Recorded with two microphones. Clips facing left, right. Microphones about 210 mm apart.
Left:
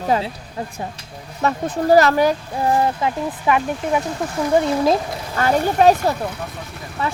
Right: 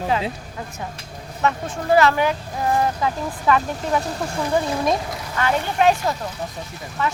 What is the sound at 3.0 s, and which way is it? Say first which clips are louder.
Speech: left 2 dB; 15° left (ahead or behind).